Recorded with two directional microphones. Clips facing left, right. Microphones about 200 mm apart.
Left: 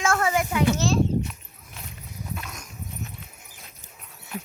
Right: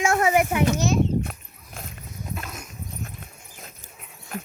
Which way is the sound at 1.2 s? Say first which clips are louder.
Right 1 dB; 50° right (ahead or behind).